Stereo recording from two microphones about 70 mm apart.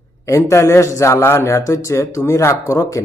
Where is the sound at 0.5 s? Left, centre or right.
Left.